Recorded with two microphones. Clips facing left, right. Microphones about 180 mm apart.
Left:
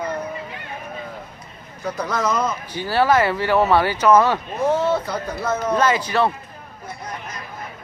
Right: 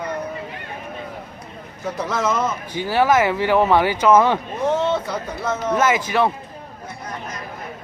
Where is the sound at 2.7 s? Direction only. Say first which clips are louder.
Right 1 dB; 15° right (ahead or behind).